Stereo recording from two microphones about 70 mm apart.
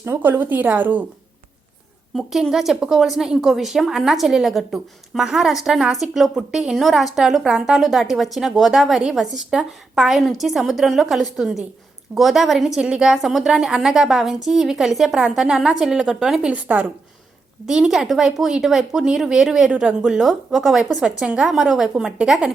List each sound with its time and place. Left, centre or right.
0.0 s a woman's voice: right
2.1 s speech: centre
16.5 s a woman's voice: right
17.7 s a woman's voice: centre